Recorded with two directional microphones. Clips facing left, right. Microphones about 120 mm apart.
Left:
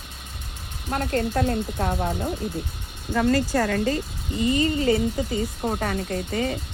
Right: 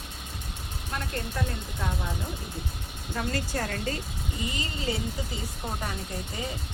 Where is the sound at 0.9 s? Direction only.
50° left (ahead or behind).